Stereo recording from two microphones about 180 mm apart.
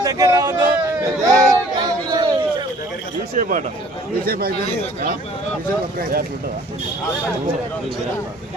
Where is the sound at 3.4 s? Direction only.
45° right (ahead or behind).